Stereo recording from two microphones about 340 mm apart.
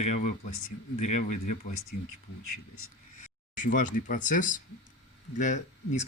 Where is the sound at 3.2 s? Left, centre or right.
Left.